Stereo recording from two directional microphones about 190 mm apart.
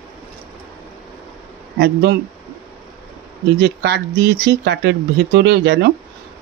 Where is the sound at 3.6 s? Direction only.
65° right (ahead or behind).